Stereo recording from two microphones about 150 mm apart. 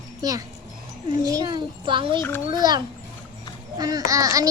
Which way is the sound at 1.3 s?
25° right (ahead or behind).